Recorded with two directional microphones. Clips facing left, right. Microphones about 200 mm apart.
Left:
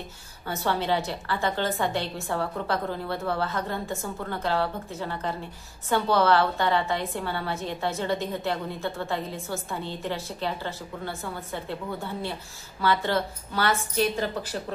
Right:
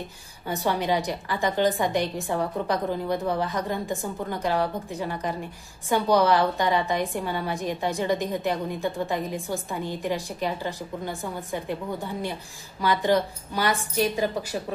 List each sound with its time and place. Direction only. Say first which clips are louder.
0.5 s a woman's voice: right 1 dB; 15° right (ahead or behind)